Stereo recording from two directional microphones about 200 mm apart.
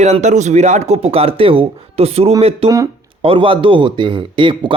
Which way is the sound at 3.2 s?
25° right (ahead or behind).